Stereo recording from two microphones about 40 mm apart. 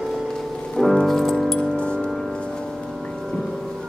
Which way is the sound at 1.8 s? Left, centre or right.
Left.